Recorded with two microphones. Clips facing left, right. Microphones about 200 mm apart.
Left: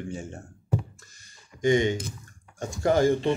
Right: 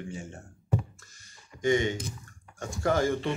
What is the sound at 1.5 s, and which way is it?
Speech, 20° left (ahead or behind).